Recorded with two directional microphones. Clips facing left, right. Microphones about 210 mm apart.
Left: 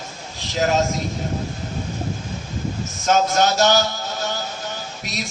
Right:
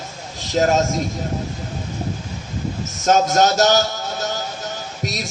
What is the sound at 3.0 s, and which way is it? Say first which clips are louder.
Speech: right 2 dB; 45° right (ahead or behind).